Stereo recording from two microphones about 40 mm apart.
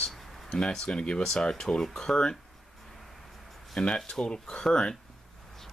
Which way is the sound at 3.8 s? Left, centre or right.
Left.